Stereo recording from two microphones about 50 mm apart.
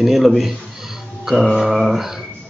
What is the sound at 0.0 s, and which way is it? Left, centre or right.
Speech, centre.